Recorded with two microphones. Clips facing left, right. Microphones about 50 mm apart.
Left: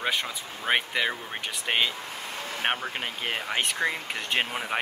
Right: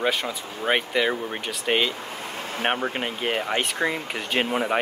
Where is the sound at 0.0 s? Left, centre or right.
Centre.